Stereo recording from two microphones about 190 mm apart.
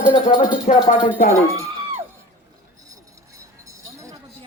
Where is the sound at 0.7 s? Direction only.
40° left (ahead or behind).